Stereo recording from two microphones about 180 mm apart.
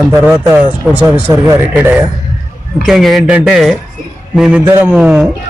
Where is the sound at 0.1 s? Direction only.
10° right (ahead or behind).